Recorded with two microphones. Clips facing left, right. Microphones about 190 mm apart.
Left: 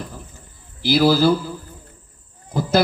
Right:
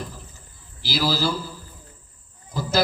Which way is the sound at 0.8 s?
55° left (ahead or behind).